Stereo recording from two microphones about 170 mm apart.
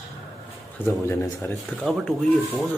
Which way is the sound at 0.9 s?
15° left (ahead or behind).